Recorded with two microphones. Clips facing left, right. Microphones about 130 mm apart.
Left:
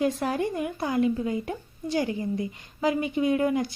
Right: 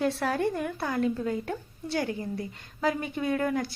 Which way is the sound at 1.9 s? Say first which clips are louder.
Left 3 dB; 50° right (ahead or behind).